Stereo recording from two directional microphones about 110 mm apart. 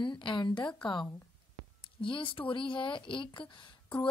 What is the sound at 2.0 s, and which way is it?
Speech, 50° left (ahead or behind).